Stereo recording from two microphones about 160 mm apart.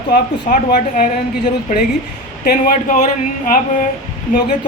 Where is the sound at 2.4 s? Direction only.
65° left (ahead or behind).